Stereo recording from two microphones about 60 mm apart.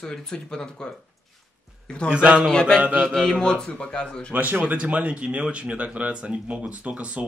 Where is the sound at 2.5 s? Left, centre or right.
Centre.